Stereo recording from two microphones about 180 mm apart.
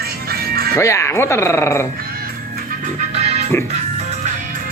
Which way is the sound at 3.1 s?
35° right (ahead or behind).